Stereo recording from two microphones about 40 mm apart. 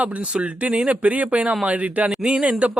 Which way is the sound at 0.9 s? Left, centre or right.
Right.